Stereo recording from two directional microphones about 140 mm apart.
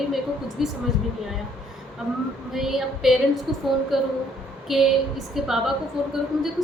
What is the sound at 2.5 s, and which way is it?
A woman's voice, centre (ahead or behind).